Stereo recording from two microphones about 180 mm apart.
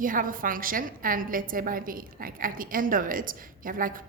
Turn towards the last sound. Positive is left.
turn(degrees=-50)  # may be behind; listen again after turning